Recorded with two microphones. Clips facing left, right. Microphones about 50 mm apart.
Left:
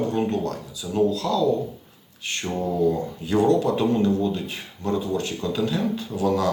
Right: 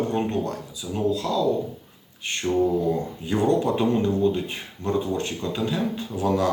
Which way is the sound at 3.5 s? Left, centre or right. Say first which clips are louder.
Right 1 dB; centre.